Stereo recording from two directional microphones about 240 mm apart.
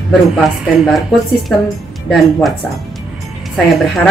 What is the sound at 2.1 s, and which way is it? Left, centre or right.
Speech, centre.